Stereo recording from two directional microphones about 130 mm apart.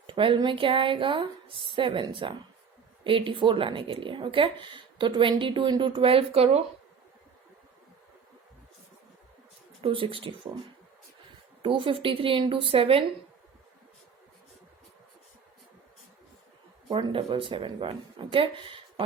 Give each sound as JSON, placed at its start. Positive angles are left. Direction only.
{"t": 0.1, "sound": "speech", "side_deg": -40}
{"t": 9.8, "sound": "speech", "side_deg": -45}
{"t": 11.6, "sound": "speech", "side_deg": -40}
{"t": 16.9, "sound": "speech", "side_deg": -40}